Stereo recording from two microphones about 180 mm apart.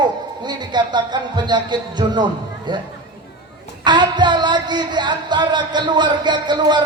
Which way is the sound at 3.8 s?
25° right (ahead or behind).